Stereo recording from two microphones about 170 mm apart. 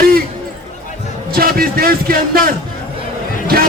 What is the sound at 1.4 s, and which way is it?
A man's voice, 60° right (ahead or behind).